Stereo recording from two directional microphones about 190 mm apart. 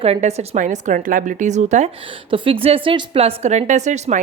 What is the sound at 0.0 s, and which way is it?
A woman's voice, 35° right (ahead or behind).